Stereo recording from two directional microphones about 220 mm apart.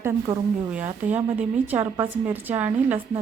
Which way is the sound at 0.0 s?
10° right (ahead or behind).